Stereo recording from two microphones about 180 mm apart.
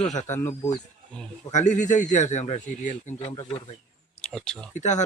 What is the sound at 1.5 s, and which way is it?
A man's voice, 40° left (ahead or behind).